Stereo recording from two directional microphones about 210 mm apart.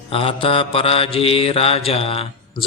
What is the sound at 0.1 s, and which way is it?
Mantra, 25° left (ahead or behind).